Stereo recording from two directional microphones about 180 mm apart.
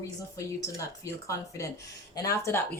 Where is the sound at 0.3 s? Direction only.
15° left (ahead or behind).